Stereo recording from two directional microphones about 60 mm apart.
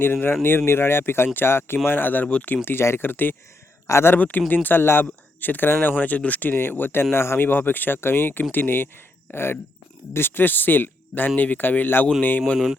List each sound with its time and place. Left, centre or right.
0.0 s speech: left
2.6 s speech: left
3.8 s speech: left
4.1 s speech: left